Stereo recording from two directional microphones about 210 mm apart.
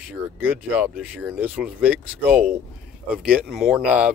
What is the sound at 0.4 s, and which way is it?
Speech, 10° right (ahead or behind).